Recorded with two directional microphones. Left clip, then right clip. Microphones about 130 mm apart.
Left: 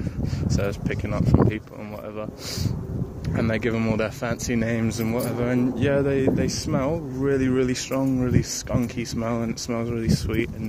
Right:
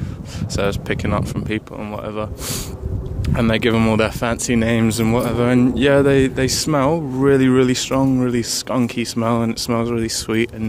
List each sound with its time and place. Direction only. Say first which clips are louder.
0.6 s speech: right 8 dB; 45° right (ahead or behind)
3.3 s speech: right 7 dB; 30° right (ahead or behind)
3.7 s speech: right 8 dB; 45° right (ahead or behind)